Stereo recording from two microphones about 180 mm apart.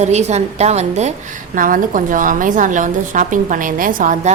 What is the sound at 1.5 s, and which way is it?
A woman's voice, 50° right (ahead or behind).